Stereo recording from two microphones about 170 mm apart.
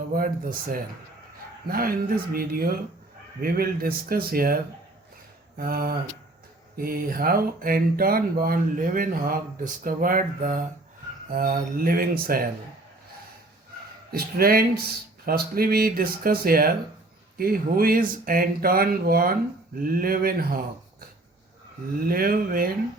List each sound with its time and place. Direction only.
0.1 s speech: 60° right (ahead or behind)
14.1 s speech: 60° right (ahead or behind)
22.0 s speech: 60° right (ahead or behind)